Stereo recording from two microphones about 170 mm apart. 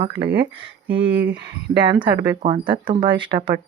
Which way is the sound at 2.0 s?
35° right (ahead or behind).